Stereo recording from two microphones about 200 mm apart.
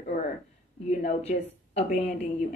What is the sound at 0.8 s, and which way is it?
A woman's voice, 30° left (ahead or behind).